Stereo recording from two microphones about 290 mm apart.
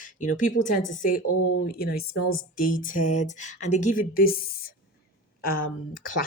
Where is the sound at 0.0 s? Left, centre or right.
Left.